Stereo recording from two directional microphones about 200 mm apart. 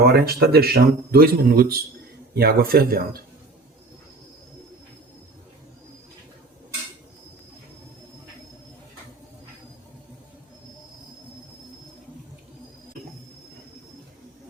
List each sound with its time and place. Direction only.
0.0 s speech: 50° right (ahead or behind)